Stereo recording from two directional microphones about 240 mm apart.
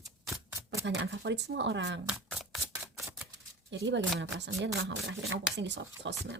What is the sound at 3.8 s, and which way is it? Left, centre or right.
Speech, right.